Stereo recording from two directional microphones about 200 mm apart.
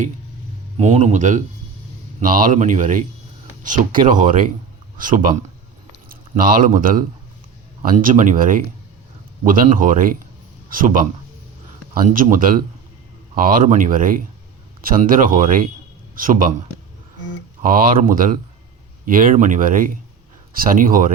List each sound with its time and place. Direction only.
0.8 s a man's voice: 35° right (ahead or behind)